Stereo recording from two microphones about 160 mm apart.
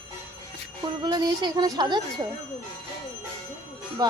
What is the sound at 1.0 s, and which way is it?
A woman's voice, 25° right (ahead or behind).